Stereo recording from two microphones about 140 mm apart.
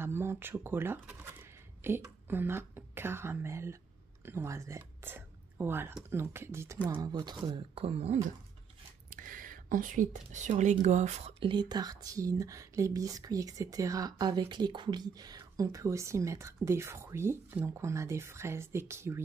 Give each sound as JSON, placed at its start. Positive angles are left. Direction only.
{"t": 0.0, "sound": "speech", "side_deg": -15}
{"t": 6.9, "sound": "speech", "side_deg": -30}
{"t": 9.1, "sound": "speech", "side_deg": -75}